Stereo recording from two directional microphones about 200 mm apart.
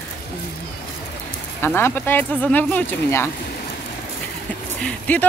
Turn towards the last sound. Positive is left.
turn(degrees=10)  # may be behind; listen again after turning